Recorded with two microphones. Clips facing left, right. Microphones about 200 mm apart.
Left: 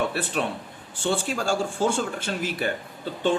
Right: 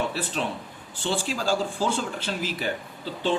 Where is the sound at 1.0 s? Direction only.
55° left (ahead or behind).